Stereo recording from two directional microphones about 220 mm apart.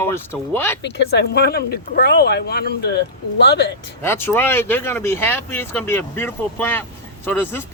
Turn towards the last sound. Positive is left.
turn(degrees=10)  # may be behind; listen again after turning